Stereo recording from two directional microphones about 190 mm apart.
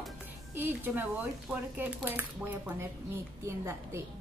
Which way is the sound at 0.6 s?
10° right (ahead or behind).